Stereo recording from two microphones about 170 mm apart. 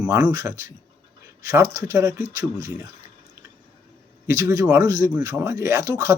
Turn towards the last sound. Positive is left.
turn(degrees=-15)  # may be behind; listen again after turning